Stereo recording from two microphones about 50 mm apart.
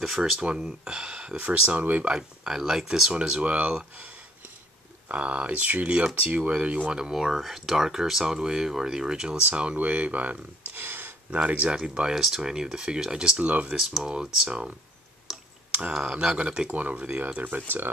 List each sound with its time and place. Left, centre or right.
0.4 s speech: centre
2.1 s speech: centre
5.0 s speech: right
10.7 s a sound: right
11.3 s speech: right
12.2 s speech: centre
13.4 s speech: right
13.7 s speech: centre
15.3 s clicking: centre
15.9 s speech: centre
17.4 s speech: right